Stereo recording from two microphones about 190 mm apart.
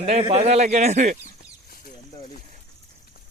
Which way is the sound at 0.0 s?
35° right (ahead or behind).